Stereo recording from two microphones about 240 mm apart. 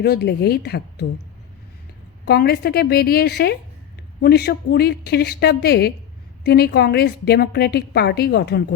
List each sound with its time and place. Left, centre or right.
0.0 s a woman's voice: left
2.2 s a woman's voice: left